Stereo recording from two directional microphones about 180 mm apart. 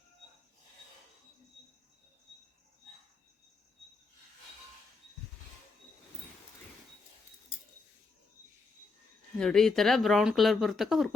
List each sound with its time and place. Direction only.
9.4 s speech: 5° left (ahead or behind)